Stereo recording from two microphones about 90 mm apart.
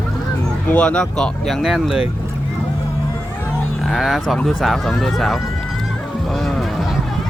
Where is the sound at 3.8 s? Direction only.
Centre (ahead or behind).